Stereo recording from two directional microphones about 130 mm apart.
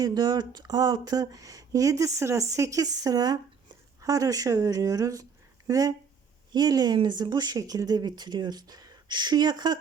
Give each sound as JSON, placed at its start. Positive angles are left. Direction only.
{"t": 0.0, "sound": "speech", "side_deg": -30}